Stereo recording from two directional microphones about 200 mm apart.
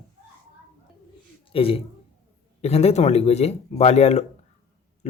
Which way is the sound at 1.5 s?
30° left (ahead or behind).